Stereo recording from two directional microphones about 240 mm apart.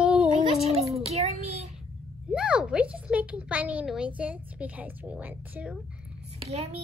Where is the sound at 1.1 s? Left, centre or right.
Right.